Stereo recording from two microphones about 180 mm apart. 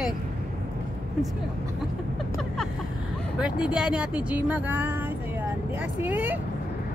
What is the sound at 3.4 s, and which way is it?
Speech, 5° right (ahead or behind).